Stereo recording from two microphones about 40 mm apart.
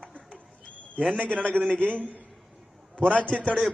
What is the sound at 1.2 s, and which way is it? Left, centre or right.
Speech, left.